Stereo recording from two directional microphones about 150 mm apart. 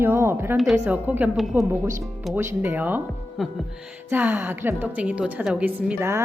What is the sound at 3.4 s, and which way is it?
Speech, centre (ahead or behind).